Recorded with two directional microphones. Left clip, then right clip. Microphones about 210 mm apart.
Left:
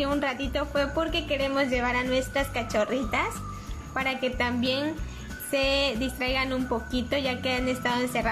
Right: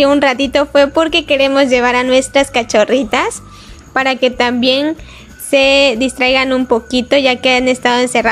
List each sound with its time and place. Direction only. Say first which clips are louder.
0.0 s a woman's voice: right 17 dB; 45° right (ahead or behind)